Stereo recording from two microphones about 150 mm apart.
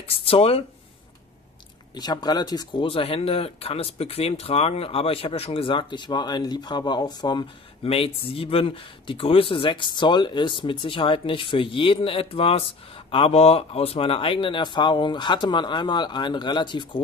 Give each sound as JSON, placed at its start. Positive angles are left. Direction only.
{"t": 0.0, "sound": "speech", "side_deg": 40}
{"t": 2.0, "sound": "speech", "side_deg": 25}